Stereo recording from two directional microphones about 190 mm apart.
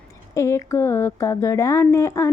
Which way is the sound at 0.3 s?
15° left (ahead or behind).